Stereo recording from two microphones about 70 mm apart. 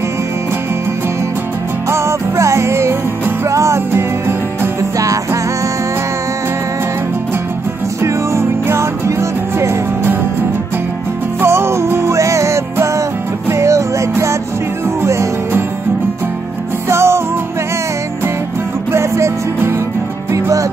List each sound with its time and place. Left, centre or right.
1.9 s music: right
4.9 s music: right
8.0 s music: right
11.4 s music: right
16.9 s music: right
18.9 s music: right